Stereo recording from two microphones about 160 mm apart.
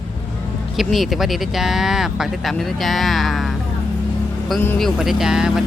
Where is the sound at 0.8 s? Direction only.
Centre (ahead or behind).